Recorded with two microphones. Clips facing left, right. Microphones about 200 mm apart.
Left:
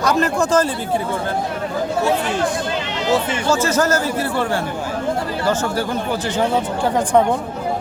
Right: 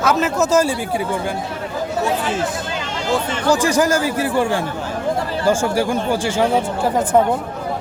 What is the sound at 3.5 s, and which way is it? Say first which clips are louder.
A man's voice: right 2 dB; 15° right (ahead or behind).